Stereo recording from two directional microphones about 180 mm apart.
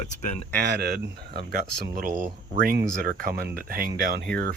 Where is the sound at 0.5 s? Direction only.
60° right (ahead or behind).